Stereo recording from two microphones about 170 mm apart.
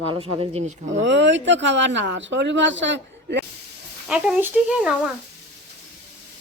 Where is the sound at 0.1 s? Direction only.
30° right (ahead or behind).